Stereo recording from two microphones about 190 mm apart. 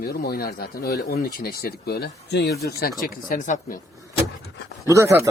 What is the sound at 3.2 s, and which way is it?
Speech, 40° left (ahead or behind).